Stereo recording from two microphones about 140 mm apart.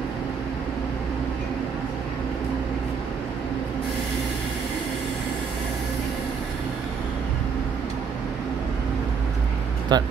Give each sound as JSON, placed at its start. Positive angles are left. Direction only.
{"t": 9.9, "sound": "speech", "side_deg": -30}